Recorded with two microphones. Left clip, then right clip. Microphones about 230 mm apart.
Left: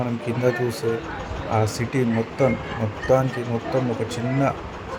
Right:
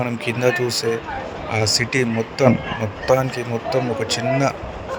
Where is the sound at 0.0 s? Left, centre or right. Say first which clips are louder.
Right 3 dB; right.